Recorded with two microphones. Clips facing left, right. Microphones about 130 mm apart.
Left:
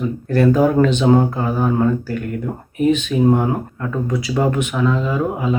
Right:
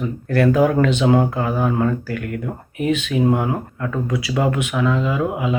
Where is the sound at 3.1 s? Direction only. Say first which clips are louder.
Left 3 dB; 5° right (ahead or behind).